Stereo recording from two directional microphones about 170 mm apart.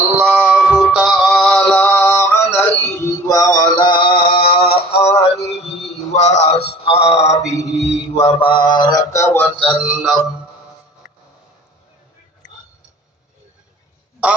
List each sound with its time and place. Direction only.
0.2 s music: 10° right (ahead or behind); by 7.3 s 40° left (ahead or behind)
7.7 s a sound: 40° left (ahead or behind)
8.1 s speech: 35° left (ahead or behind); by 9.5 s 15° left (ahead or behind)
9.6 s speech: centre (ahead or behind)